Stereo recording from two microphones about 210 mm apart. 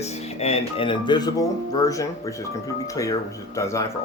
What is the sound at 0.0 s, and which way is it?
Speech, 30° left (ahead or behind).